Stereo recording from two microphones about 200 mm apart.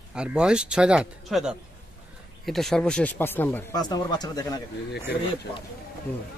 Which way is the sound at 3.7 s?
20° left (ahead or behind).